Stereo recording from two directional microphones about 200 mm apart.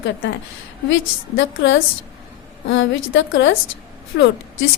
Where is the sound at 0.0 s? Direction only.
65° left (ahead or behind).